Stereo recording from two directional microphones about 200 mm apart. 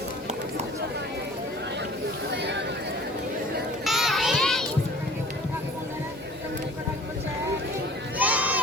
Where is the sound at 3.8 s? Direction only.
Centre (ahead or behind).